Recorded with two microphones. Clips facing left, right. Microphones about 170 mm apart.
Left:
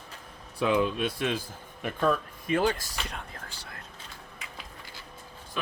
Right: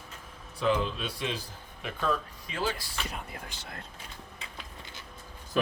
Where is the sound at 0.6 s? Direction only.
60° left (ahead or behind).